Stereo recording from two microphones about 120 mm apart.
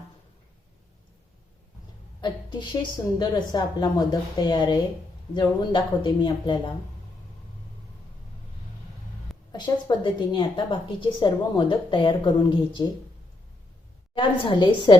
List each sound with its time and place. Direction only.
2.2 s a woman's voice: 40° left (ahead or behind)
9.5 s a woman's voice: 35° left (ahead or behind)
14.2 s a woman's voice: 40° left (ahead or behind)